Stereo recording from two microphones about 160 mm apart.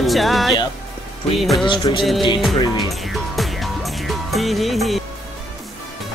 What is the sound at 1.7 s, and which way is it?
Music, 30° left (ahead or behind).